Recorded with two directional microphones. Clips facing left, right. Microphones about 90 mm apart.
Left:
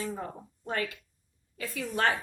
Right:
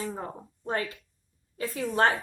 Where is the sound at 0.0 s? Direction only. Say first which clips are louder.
Right 1 dB; 30° right (ahead or behind).